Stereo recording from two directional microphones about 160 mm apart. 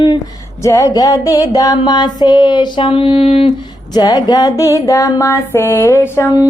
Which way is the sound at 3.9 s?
25° left (ahead or behind).